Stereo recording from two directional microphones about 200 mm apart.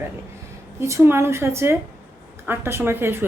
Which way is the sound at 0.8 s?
15° right (ahead or behind).